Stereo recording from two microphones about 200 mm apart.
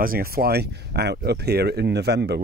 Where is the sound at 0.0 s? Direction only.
45° right (ahead or behind).